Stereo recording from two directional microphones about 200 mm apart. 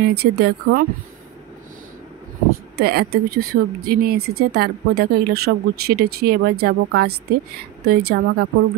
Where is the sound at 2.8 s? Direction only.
50° right (ahead or behind).